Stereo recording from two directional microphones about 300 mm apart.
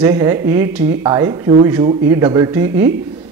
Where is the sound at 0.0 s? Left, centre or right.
Centre.